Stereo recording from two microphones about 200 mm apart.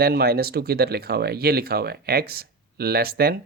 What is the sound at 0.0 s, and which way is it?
Speech, 50° right (ahead or behind).